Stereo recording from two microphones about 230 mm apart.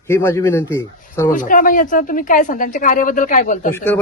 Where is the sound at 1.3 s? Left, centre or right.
Left.